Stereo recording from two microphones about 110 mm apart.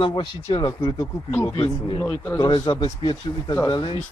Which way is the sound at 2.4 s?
45° left (ahead or behind).